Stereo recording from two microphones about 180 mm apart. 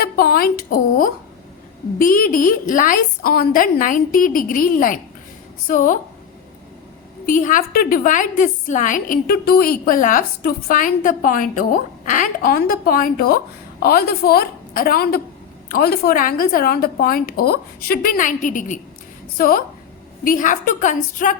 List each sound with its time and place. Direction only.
0.0 s a woman's voice: 55° left (ahead or behind)
7.3 s a woman's voice: 45° left (ahead or behind)